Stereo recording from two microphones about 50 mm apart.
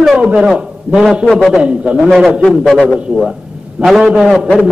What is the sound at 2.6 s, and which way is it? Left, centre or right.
Speech, centre.